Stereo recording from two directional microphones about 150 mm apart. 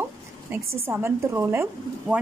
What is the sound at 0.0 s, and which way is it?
A woman's voice, 15° right (ahead or behind).